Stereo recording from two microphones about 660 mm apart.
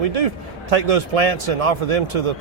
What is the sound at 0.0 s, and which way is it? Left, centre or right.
A man's voice, right.